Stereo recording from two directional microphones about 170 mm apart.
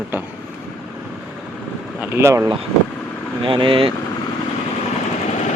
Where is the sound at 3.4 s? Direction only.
30° right (ahead or behind).